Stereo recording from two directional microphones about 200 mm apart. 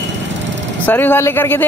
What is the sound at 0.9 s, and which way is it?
Speech, 10° left (ahead or behind).